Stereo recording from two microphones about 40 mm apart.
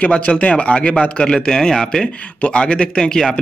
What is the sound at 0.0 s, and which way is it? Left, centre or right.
Speech, left.